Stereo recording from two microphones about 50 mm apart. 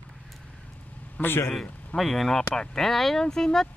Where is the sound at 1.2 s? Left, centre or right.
Left.